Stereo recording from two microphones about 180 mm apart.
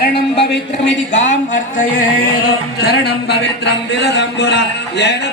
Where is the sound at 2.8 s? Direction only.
65° left (ahead or behind).